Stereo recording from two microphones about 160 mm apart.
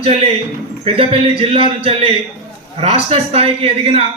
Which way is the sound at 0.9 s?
35° right (ahead or behind).